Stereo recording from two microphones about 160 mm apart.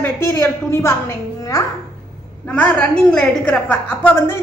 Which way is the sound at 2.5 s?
10° left (ahead or behind).